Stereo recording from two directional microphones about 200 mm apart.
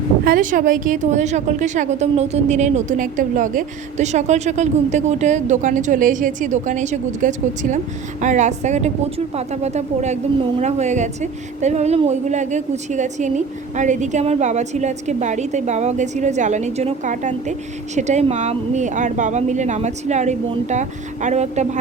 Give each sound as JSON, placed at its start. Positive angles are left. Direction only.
{"t": 0.3, "sound": "a woman's voice", "side_deg": -45}